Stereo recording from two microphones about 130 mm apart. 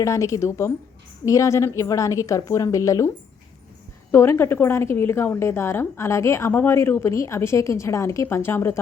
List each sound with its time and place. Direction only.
0.0 s a woman's voice: 25° left (ahead or behind)
4.1 s a woman's voice: 20° left (ahead or behind)